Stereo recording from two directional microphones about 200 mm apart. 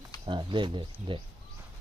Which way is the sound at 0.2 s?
25° right (ahead or behind).